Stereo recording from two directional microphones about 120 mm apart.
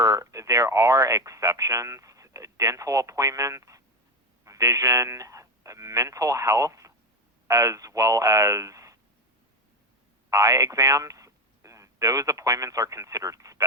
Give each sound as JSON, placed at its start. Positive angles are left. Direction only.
{"t": 0.0, "sound": "speech", "side_deg": -30}
{"t": 10.2, "sound": "speech", "side_deg": -30}